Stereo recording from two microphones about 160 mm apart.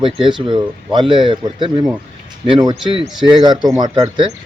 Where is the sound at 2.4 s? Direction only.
35° right (ahead or behind).